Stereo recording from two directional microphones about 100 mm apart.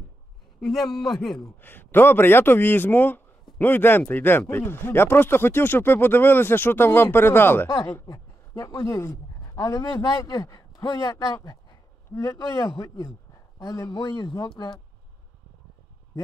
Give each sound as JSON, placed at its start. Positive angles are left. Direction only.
{"t": 0.6, "sound": "a man's voice", "side_deg": 5}
{"t": 1.6, "sound": "speech", "side_deg": 20}
{"t": 7.7, "sound": "a man's voice", "side_deg": 35}